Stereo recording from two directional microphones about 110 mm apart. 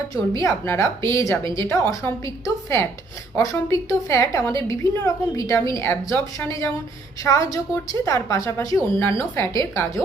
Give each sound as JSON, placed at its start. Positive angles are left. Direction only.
{"t": 0.1, "sound": "speech", "side_deg": 30}